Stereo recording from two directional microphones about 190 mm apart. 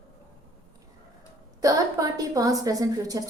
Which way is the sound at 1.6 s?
20° right (ahead or behind).